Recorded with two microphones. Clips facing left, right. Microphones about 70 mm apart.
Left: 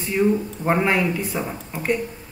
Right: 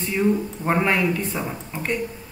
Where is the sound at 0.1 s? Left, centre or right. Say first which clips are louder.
Left 2 dB; centre.